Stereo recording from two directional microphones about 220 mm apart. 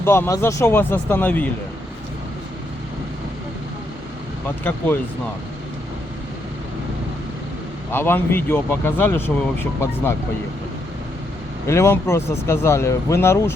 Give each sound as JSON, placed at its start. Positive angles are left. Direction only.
{"t": 0.0, "sound": "speech", "side_deg": 10}
{"t": 4.4, "sound": "speech", "side_deg": 10}
{"t": 7.9, "sound": "speech", "side_deg": 10}
{"t": 11.6, "sound": "speech", "side_deg": 10}